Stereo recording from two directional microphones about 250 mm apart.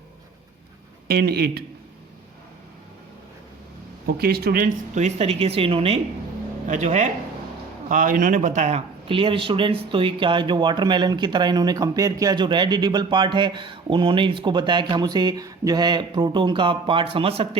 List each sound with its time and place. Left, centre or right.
1.0 s speech: right
4.0 s speech: right